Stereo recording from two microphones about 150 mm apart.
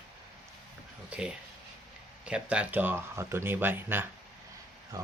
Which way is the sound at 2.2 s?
5° right (ahead or behind).